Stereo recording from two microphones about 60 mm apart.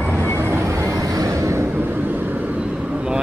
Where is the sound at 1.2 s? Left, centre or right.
Right.